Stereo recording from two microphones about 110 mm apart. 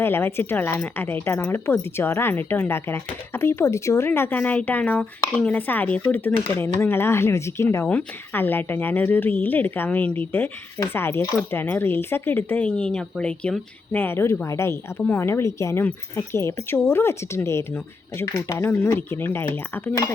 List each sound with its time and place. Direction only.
0.0 s a woman's voice: 20° left (ahead or behind)